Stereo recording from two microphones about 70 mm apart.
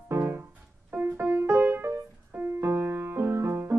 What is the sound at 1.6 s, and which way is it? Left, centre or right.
Music, right.